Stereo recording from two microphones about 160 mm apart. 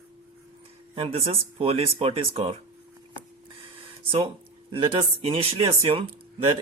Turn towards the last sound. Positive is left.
turn(degrees=-35)  # may be behind; listen again after turning